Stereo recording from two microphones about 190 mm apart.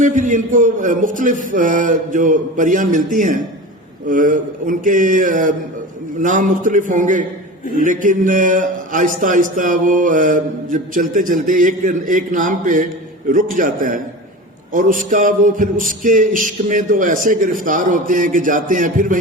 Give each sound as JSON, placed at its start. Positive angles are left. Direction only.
{"t": 0.0, "sound": "a man's voice", "side_deg": -40}